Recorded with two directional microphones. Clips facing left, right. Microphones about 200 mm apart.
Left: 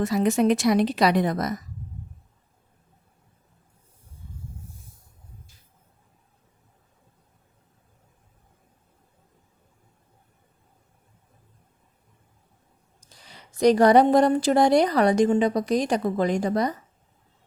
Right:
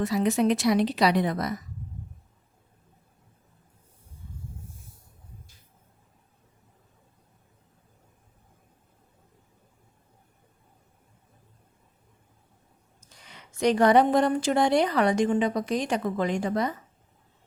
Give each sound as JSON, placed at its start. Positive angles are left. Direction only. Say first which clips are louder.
{"t": 0.0, "sound": "a woman's voice", "louder": "left 2 dB", "side_deg": 45}
{"t": 13.0, "sound": "a woman's voice", "louder": "left 1 dB", "side_deg": 35}